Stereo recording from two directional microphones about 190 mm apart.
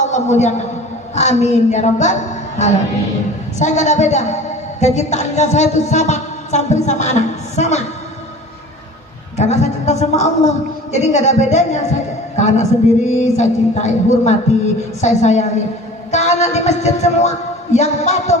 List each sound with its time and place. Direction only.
0.0 s a man's voice: 35° left (ahead or behind)
1.1 s music: 35° left (ahead or behind)
3.6 s music: 40° left (ahead or behind)
9.4 s music: 35° left (ahead or behind)
16.1 s speech: 35° left (ahead or behind)